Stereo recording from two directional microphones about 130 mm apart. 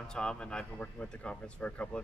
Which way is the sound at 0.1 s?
5° left (ahead or behind).